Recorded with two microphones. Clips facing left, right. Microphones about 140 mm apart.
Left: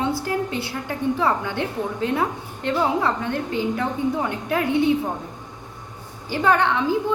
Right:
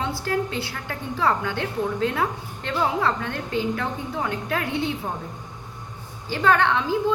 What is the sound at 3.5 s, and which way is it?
A woman's voice, 20° left (ahead or behind).